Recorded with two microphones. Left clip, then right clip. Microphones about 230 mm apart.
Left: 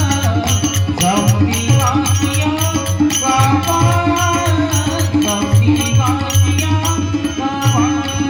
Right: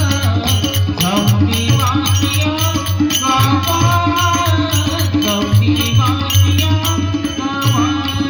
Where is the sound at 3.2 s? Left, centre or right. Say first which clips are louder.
Even; right.